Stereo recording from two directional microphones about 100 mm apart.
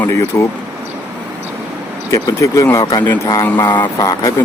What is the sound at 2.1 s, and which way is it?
Speech, 35° left (ahead or behind).